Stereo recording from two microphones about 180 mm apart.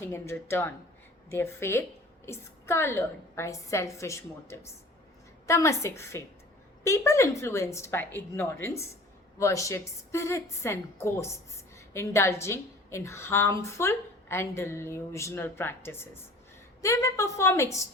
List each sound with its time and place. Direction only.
0.0 s a woman's voice: 15° left (ahead or behind)